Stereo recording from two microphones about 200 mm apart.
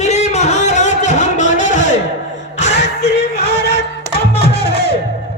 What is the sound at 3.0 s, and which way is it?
Music, 55° left (ahead or behind).